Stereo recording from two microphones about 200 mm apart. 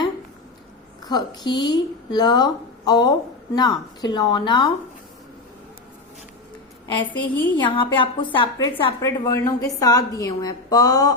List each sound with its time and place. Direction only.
1.0 s a woman's voice: 20° left (ahead or behind)
6.8 s a woman's voice: 25° left (ahead or behind)